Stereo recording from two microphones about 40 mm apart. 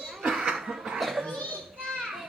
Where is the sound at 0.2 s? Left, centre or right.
Centre.